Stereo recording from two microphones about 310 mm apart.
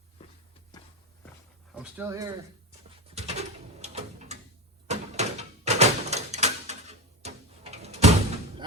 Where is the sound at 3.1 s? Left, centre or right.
Right.